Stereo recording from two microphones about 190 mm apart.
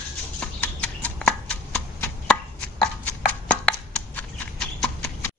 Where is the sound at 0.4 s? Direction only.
5° left (ahead or behind).